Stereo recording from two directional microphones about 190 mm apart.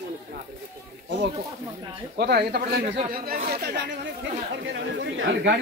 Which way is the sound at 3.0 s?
40° right (ahead or behind).